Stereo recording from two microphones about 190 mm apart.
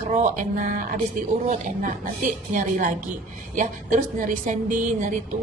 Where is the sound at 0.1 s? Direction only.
40° right (ahead or behind).